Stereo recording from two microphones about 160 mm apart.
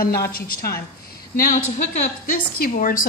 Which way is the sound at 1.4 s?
55° left (ahead or behind).